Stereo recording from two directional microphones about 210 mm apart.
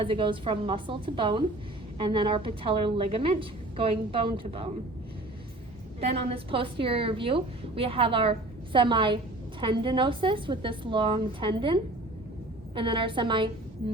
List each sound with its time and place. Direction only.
0.0 s a woman's voice: 25° right (ahead or behind)
6.0 s a woman's voice: 30° right (ahead or behind)